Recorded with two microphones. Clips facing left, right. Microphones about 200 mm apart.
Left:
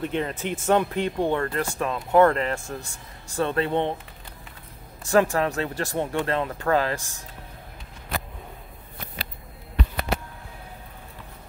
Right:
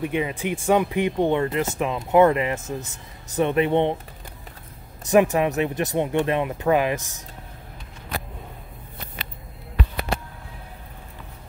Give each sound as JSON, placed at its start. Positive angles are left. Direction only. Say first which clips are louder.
{"t": 0.0, "sound": "speech", "louder": "right 2 dB", "side_deg": -10}
{"t": 5.0, "sound": "speech", "louder": "right 3 dB", "side_deg": -20}